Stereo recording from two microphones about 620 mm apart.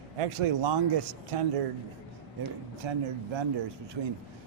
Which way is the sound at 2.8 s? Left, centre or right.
Right.